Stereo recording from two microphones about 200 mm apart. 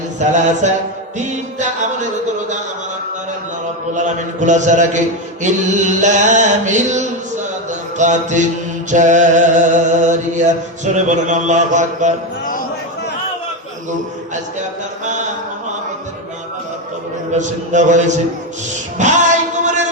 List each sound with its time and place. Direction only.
0.2 s mantra: 35° right (ahead or behind)
3.9 s mantra: 40° right (ahead or behind)
17.3 s mantra: 35° right (ahead or behind)
18.9 s music: 35° right (ahead or behind)